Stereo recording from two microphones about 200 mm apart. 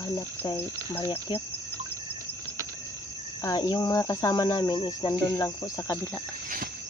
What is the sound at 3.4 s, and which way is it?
Speech, 20° left (ahead or behind).